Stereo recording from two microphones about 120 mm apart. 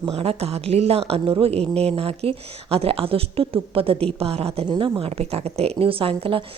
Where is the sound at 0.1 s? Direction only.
55° right (ahead or behind).